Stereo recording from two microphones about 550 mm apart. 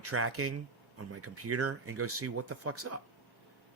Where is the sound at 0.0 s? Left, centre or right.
Right.